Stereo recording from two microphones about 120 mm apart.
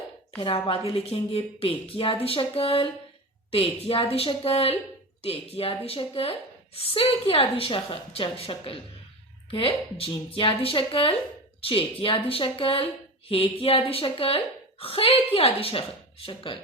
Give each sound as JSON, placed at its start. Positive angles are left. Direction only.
{"t": 0.3, "sound": "a woman's voice", "side_deg": 50}